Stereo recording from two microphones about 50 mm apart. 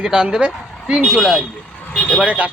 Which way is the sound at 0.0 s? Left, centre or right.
Centre.